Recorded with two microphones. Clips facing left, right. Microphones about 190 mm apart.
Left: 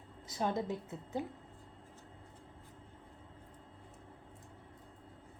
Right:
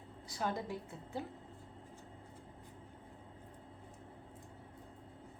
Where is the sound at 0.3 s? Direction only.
20° left (ahead or behind).